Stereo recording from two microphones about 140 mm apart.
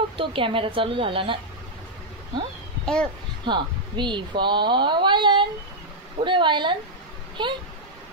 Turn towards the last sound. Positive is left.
turn(degrees=-35)  # may be behind; listen again after turning